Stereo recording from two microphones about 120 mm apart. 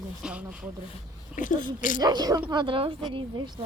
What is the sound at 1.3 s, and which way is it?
Speech, 90° left.